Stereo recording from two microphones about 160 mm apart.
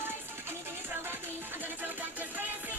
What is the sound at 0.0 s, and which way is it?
Music, 15° right (ahead or behind).